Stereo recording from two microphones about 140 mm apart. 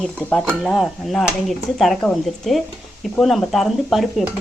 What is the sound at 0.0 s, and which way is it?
Speech, 10° left (ahead or behind).